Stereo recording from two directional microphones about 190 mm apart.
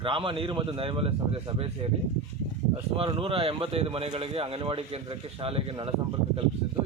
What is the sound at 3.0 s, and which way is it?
Speech, 30° right (ahead or behind).